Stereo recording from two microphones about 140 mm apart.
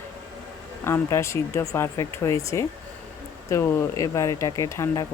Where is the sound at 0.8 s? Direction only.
20° left (ahead or behind).